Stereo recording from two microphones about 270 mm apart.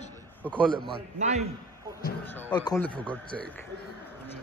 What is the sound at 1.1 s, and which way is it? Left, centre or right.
Speech, right.